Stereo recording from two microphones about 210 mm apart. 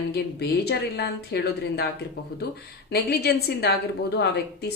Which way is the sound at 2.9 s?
50° left (ahead or behind).